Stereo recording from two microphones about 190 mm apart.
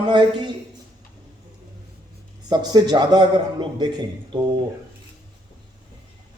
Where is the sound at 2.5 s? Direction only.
20° right (ahead or behind).